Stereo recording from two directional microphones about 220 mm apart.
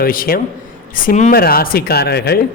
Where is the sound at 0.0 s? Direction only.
40° left (ahead or behind).